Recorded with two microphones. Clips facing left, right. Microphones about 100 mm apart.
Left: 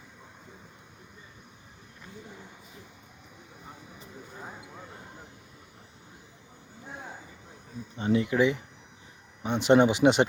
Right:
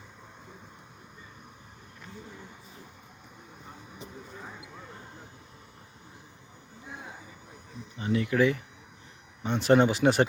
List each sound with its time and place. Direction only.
7.9 s speech: 25° left (ahead or behind)